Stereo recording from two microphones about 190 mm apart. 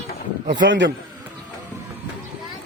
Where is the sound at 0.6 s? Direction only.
70° right (ahead or behind).